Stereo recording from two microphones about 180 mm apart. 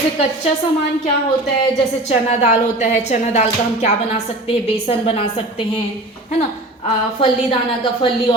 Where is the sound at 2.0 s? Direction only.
40° left (ahead or behind).